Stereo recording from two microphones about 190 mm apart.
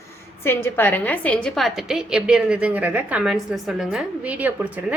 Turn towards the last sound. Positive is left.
turn(degrees=-10)  # may be behind; listen again after turning